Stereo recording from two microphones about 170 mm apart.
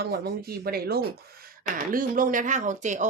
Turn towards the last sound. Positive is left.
turn(degrees=-45)  # may be behind; listen again after turning